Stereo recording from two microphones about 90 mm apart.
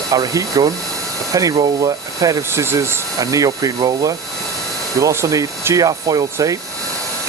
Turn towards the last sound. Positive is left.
turn(degrees=-40)  # may be behind; listen again after turning